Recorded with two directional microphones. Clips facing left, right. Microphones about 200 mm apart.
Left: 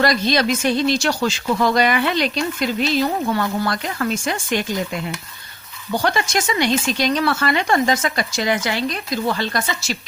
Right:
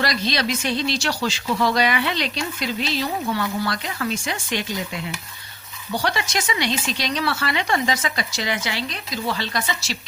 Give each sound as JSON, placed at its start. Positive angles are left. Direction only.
{"t": 0.0, "sound": "speech", "side_deg": 50}
{"t": 6.0, "sound": "speech", "side_deg": 50}